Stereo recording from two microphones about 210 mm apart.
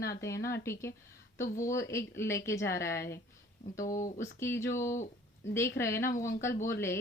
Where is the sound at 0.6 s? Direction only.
10° left (ahead or behind).